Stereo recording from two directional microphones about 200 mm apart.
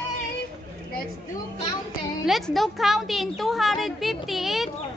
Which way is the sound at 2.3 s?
Centre (ahead or behind).